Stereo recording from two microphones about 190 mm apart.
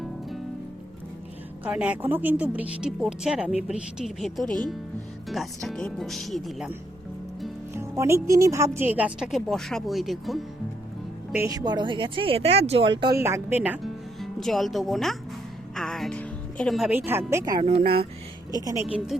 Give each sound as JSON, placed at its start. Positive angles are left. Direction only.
{"t": 1.6, "sound": "a woman's voice", "side_deg": -5}
{"t": 7.8, "sound": "speech", "side_deg": -15}
{"t": 11.3, "sound": "speech", "side_deg": -15}
{"t": 13.1, "sound": "speech", "side_deg": -15}
{"t": 15.7, "sound": "music", "side_deg": 0}
{"t": 17.1, "sound": "a woman's voice", "side_deg": -15}
{"t": 17.6, "sound": "speech", "side_deg": -30}
{"t": 18.5, "sound": "speech", "side_deg": -20}
{"t": 18.9, "sound": "speech", "side_deg": -5}